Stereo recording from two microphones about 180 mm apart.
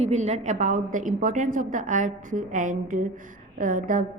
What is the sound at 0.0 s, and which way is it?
A woman's voice, 40° right (ahead or behind).